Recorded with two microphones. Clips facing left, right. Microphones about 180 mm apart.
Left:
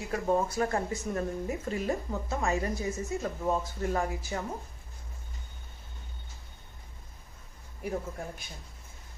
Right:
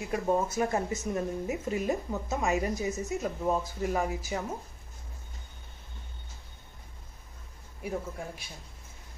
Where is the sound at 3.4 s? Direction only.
5° right (ahead or behind).